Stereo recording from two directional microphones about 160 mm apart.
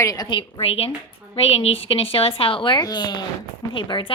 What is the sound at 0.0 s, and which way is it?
A woman's voice, 20° left (ahead or behind).